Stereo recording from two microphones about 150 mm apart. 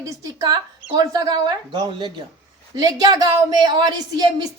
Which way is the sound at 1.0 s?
25° right (ahead or behind).